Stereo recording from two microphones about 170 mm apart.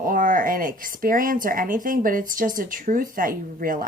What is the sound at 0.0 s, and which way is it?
A woman's voice, 55° right (ahead or behind).